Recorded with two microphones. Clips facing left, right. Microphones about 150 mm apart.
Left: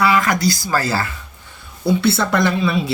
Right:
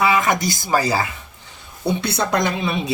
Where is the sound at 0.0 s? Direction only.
20° right (ahead or behind).